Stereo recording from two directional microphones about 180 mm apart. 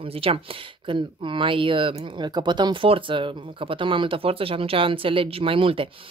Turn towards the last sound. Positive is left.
turn(degrees=-30)  # may be behind; listen again after turning